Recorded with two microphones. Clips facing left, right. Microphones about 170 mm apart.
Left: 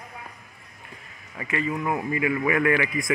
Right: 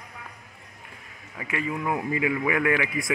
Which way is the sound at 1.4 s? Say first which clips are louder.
Left 2 dB; 10° right (ahead or behind).